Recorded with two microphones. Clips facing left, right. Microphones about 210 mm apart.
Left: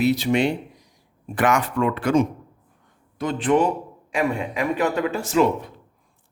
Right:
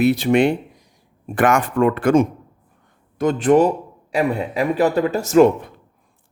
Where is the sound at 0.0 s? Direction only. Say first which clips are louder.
Right 4 dB; 55° right (ahead or behind).